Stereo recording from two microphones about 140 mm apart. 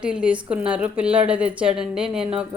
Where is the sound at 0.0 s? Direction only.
10° right (ahead or behind).